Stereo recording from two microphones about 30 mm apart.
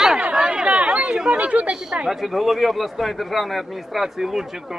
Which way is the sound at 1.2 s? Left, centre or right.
Right.